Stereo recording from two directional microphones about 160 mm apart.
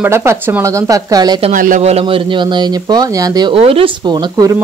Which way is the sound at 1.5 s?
55° right (ahead or behind).